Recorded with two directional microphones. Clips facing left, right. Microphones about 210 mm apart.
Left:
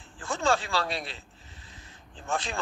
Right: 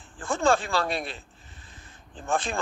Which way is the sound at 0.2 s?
50° right (ahead or behind).